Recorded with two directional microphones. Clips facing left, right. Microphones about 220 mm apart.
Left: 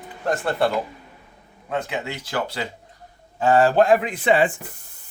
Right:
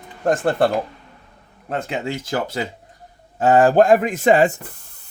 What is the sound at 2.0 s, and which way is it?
Speech, 45° right (ahead or behind).